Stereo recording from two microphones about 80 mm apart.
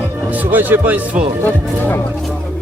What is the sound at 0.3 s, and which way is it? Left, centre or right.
A man's voice, right.